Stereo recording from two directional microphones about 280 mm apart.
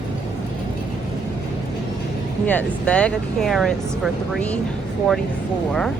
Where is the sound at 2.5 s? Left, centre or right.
Centre.